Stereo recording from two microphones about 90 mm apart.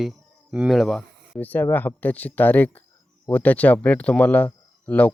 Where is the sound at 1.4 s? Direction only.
20° left (ahead or behind).